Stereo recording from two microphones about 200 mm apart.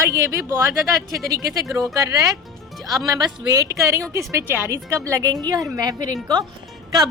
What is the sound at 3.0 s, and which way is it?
Speech, 15° right (ahead or behind).